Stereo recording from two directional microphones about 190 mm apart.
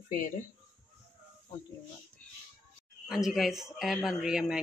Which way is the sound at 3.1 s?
Centre (ahead or behind).